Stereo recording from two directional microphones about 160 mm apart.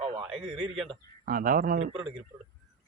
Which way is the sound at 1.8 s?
30° right (ahead or behind).